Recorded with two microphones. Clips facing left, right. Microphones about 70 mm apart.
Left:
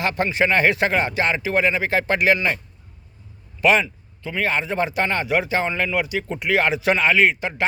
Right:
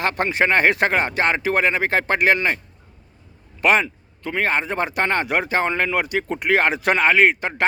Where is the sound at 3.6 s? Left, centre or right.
Right.